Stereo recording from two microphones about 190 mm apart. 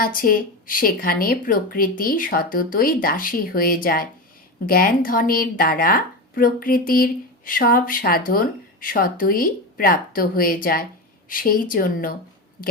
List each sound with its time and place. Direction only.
0.0 s speech: 50° left (ahead or behind)